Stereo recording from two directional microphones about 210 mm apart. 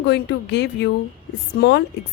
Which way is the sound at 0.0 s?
55° left (ahead or behind).